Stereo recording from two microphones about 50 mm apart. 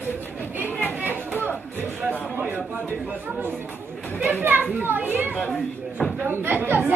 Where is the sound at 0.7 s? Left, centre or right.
Left.